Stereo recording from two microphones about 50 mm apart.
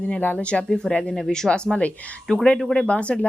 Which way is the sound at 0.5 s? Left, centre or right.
Left.